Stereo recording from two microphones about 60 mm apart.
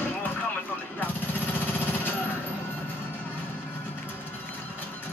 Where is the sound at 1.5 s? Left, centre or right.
Left.